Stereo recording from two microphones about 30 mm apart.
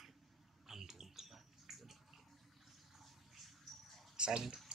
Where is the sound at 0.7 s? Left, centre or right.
Centre.